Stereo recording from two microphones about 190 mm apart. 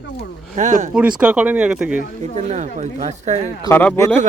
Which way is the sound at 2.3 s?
35° right (ahead or behind).